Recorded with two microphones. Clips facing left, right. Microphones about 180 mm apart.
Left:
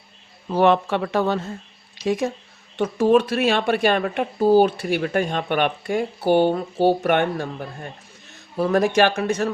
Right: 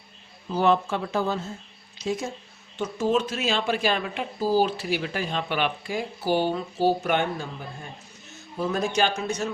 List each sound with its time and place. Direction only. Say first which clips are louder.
0.5 s speech: left 5 dB; 70° left (ahead or behind)
2.7 s speech: left 7 dB; 60° left (ahead or behind)
8.5 s speech: left 7 dB; 75° left (ahead or behind)